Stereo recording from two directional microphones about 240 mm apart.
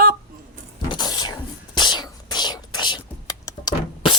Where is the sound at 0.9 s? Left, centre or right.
Centre.